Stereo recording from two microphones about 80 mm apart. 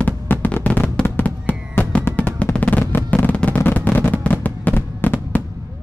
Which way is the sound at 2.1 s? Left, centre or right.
Centre.